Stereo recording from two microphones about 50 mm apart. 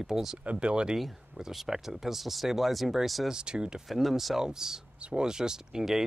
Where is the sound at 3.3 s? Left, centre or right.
Centre.